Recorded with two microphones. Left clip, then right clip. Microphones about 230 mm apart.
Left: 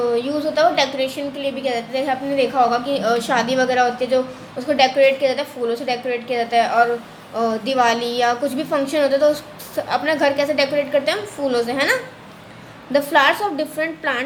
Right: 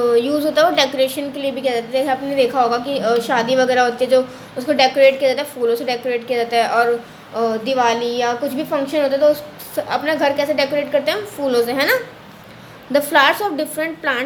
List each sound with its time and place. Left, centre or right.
0.0 s a woman's voice: right